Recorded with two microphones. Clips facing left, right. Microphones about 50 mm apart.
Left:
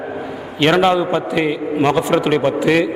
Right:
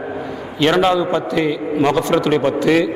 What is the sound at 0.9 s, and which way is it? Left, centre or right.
A man's voice, left.